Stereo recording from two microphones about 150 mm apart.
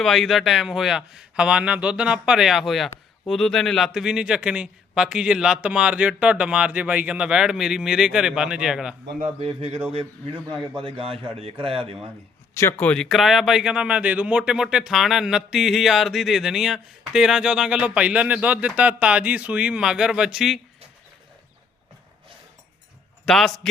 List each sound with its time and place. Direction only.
0.0 s speech: centre (ahead or behind)
9.0 s a man's voice: 65° right (ahead or behind)
9.4 s a man's voice: 40° right (ahead or behind)
12.5 s speech: 15° left (ahead or behind); by 20.6 s 5° right (ahead or behind)
23.2 s speech: 5° left (ahead or behind)